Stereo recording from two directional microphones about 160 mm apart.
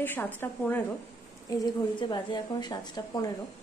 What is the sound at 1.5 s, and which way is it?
A woman's voice, 30° left (ahead or behind).